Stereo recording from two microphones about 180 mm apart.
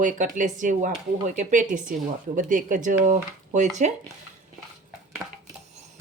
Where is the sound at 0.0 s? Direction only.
45° right (ahead or behind).